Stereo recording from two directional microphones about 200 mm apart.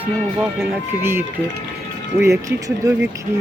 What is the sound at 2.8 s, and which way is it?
Speech, 15° right (ahead or behind).